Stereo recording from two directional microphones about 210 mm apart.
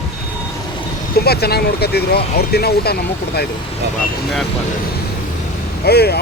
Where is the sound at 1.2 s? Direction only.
50° left (ahead or behind).